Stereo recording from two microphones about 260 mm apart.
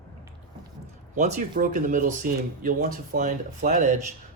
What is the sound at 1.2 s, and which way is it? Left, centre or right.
Speech, right.